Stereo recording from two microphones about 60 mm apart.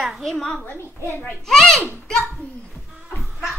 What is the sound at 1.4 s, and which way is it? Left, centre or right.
A child's voice, centre.